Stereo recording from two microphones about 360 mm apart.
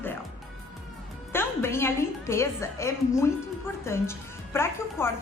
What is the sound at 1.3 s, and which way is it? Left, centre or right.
A woman's voice, centre.